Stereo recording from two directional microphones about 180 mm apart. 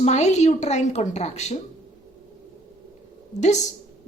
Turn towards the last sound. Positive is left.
turn(degrees=40)  # may be behind; listen again after turning